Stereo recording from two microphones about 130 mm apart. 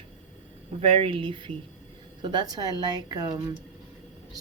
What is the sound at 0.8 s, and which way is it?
Speech, 45° right (ahead or behind).